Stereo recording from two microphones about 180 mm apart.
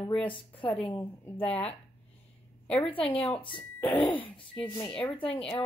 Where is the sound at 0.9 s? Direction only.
15° left (ahead or behind).